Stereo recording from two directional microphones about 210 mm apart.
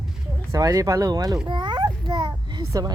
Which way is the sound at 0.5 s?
15° right (ahead or behind).